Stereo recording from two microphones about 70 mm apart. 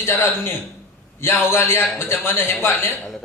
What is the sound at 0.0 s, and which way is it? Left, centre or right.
A man's voice, left.